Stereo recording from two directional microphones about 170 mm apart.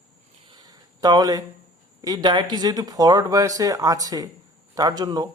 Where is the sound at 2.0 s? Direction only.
25° right (ahead or behind).